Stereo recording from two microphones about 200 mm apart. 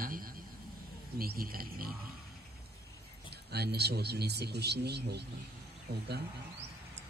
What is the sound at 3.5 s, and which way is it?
A man's voice, 55° right (ahead or behind).